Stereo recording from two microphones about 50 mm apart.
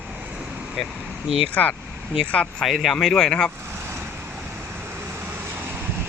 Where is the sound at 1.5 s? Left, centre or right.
Left.